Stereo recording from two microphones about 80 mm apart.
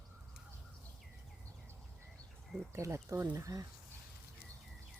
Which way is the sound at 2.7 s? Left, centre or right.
Right.